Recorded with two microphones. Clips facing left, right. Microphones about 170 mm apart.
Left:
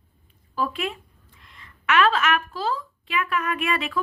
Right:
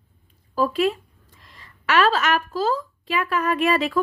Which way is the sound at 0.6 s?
40° right (ahead or behind).